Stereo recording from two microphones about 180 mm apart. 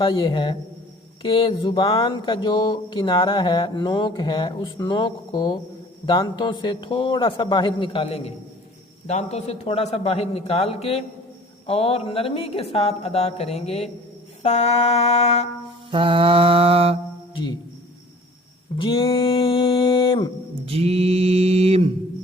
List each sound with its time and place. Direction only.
0.0 s speech: 25° left (ahead or behind)
15.9 s mantra: 30° right (ahead or behind)
18.8 s a sound: 30° left (ahead or behind)
20.7 s mantra: 35° right (ahead or behind)